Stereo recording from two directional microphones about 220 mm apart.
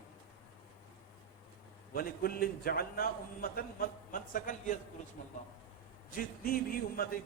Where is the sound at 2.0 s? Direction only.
40° left (ahead or behind).